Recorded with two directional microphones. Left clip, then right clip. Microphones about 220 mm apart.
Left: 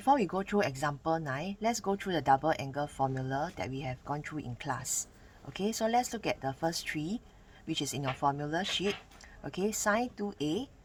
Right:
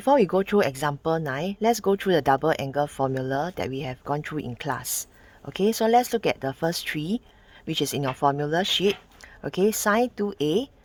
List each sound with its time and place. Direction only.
0.0 s speech: 40° right (ahead or behind)